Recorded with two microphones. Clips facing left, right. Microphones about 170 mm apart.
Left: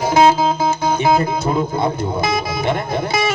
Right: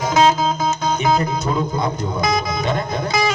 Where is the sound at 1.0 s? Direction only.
25° left (ahead or behind).